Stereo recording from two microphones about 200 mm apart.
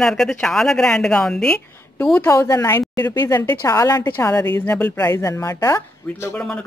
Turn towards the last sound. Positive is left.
turn(degrees=5)  # may be behind; listen again after turning